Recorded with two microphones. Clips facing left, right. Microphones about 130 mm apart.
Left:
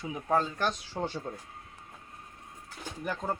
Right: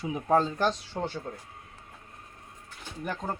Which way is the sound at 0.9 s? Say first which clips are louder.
Right 1 dB; centre (ahead or behind).